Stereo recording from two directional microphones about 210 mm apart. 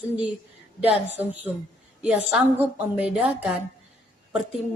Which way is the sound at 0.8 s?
10° right (ahead or behind).